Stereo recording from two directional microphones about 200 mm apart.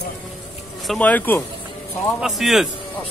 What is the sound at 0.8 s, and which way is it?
A man's voice, 5° left (ahead or behind).